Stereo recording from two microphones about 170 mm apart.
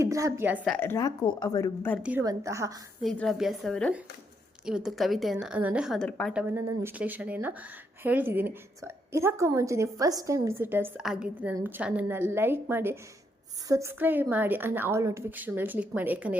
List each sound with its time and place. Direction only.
0.0 s a woman's voice: 20° right (ahead or behind)
0.8 s a woman's voice: 15° left (ahead or behind)
2.2 s a woman's voice: 20° right (ahead or behind)
3.0 s a woman's voice: centre (ahead or behind)
6.3 s a woman's voice: 10° right (ahead or behind)